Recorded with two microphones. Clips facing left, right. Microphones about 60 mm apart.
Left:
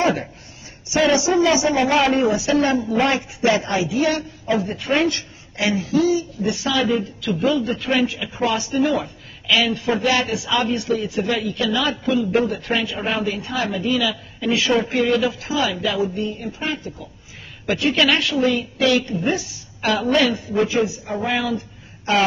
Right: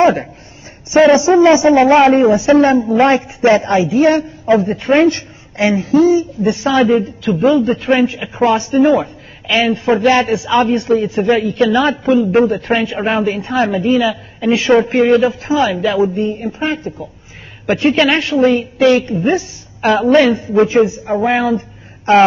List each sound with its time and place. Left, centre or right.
0.0 s a man's voice: right